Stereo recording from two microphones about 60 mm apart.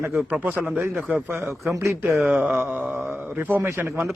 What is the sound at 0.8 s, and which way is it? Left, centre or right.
Speech, right.